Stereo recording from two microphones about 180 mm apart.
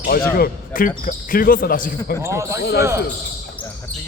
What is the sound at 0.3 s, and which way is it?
Speech, 55° left (ahead or behind).